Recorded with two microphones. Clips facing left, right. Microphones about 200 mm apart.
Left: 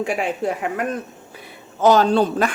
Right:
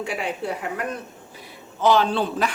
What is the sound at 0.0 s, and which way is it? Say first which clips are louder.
A woman's voice: left 5 dB; 50° left (ahead or behind).